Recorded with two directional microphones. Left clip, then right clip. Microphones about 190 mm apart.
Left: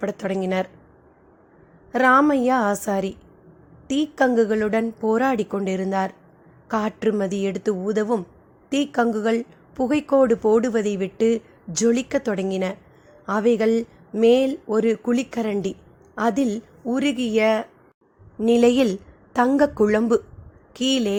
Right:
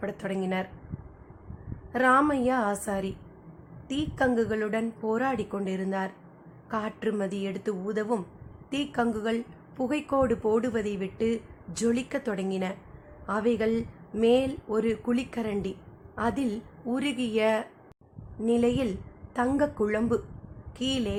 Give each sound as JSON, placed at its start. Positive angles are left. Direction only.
{"t": 0.0, "sound": "a woman's voice", "side_deg": 35}
{"t": 1.9, "sound": "a woman's voice", "side_deg": 35}
{"t": 18.3, "sound": "a woman's voice", "side_deg": 40}